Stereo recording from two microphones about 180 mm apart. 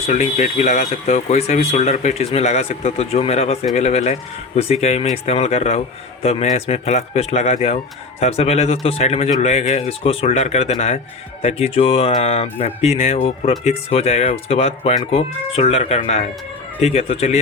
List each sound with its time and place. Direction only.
0.1 s speech: 45° left (ahead or behind)